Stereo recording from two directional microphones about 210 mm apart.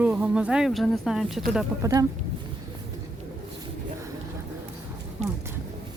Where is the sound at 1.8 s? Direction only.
15° right (ahead or behind).